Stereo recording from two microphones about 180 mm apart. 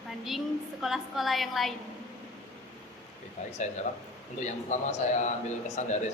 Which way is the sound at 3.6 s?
40° left (ahead or behind).